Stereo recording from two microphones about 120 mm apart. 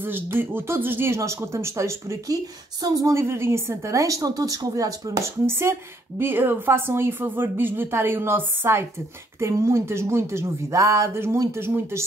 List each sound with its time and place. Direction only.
0.0 s speech: 15° right (ahead or behind)